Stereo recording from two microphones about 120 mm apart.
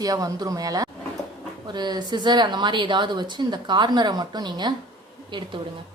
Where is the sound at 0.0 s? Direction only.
30° right (ahead or behind).